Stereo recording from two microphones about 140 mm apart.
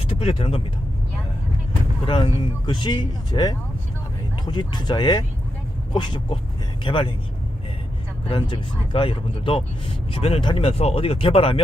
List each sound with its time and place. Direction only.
0.0 s speech: 45° left (ahead or behind)
2.0 s speech: 35° left (ahead or behind)
8.3 s speech: 35° left (ahead or behind)